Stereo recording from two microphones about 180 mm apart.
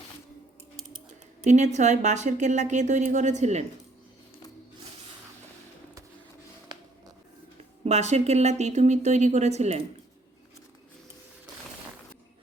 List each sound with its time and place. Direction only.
1.5 s a woman's voice: 40° right (ahead or behind)
6.7 s a sound: 25° right (ahead or behind)
7.9 s a woman's voice: 35° right (ahead or behind)